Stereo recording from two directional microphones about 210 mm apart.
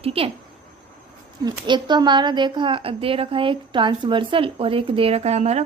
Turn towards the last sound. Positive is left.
turn(degrees=-30)  # may be behind; listen again after turning